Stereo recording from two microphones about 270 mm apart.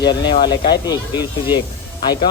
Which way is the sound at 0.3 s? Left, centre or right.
Centre.